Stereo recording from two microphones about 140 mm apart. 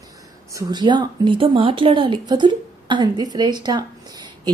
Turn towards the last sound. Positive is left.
turn(degrees=-30)  # may be behind; listen again after turning